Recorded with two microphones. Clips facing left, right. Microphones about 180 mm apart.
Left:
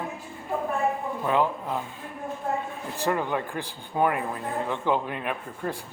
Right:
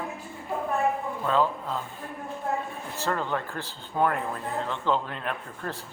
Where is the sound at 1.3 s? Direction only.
15° left (ahead or behind).